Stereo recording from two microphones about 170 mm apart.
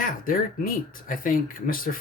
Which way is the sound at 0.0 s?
55° left (ahead or behind).